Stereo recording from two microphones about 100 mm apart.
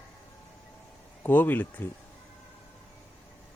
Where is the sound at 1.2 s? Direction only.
20° left (ahead or behind).